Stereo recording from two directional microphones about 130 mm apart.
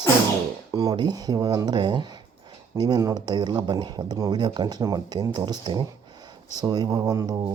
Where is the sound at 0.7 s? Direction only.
30° right (ahead or behind).